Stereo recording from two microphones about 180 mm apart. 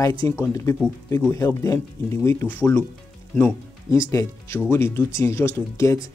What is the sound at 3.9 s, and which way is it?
Speech, 15° left (ahead or behind).